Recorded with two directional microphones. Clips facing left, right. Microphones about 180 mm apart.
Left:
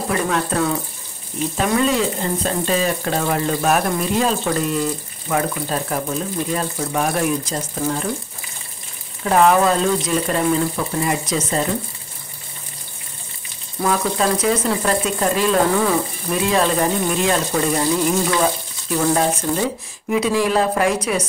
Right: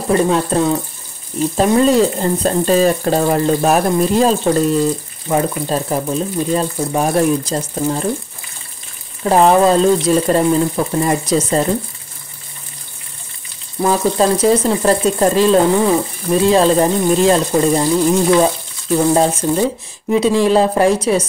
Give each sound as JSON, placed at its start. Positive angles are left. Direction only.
{"t": 0.1, "sound": "speech", "side_deg": -30}
{"t": 1.8, "sound": "speech", "side_deg": -40}
{"t": 9.2, "sound": "speech", "side_deg": -30}
{"t": 13.7, "sound": "speech", "side_deg": -25}